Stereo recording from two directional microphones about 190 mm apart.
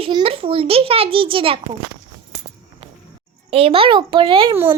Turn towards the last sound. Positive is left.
turn(degrees=-15)  # may be behind; listen again after turning